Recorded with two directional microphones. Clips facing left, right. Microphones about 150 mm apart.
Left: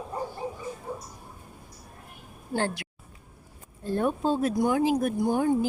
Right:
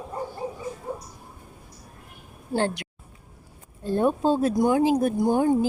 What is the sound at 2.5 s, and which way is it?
Speech, 20° right (ahead or behind).